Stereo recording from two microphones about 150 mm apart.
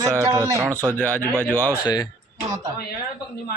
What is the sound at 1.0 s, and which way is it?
Speech, 10° left (ahead or behind).